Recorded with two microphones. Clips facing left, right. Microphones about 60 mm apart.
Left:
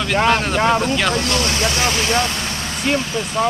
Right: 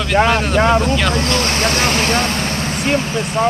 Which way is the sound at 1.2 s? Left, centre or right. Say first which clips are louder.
Right 2 dB; right.